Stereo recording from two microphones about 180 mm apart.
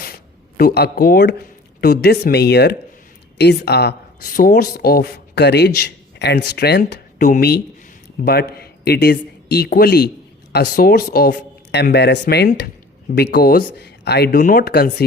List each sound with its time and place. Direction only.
0.5 s a man's voice: 60° left (ahead or behind)